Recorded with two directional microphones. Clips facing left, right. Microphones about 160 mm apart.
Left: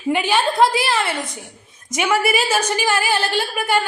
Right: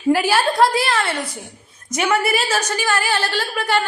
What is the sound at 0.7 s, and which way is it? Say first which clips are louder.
Speech: right 1 dB; 25° left (ahead or behind).